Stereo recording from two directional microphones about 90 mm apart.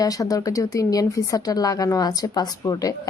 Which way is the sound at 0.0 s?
40° left (ahead or behind).